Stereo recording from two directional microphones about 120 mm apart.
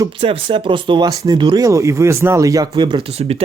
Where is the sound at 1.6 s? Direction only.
25° right (ahead or behind).